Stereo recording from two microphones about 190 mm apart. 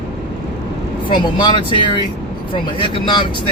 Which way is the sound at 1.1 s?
25° left (ahead or behind).